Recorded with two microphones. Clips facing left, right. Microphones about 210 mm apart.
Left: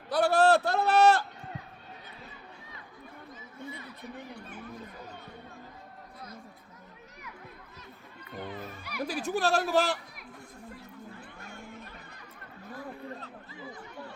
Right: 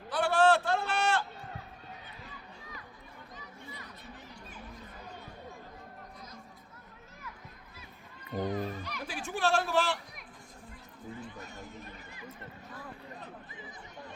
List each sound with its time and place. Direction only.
0.1 s a sound: 40° left (ahead or behind)
4.4 s chatter: 60° left (ahead or behind)
8.4 s speech: 40° right (ahead or behind)
8.8 s music: 10° left (ahead or behind)
9.0 s speech: 40° left (ahead or behind)
13.1 s a sound: 20° right (ahead or behind)